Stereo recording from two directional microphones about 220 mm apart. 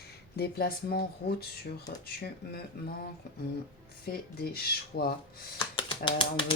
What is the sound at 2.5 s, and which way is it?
Speech, 45° left (ahead or behind).